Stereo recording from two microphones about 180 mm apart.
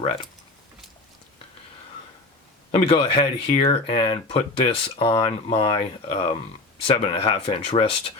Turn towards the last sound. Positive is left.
turn(degrees=30)  # may be behind; listen again after turning